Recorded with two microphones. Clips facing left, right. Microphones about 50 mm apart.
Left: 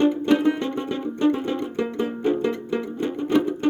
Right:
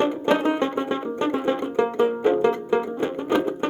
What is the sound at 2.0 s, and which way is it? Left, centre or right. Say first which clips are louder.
Music: right 3 dB; centre.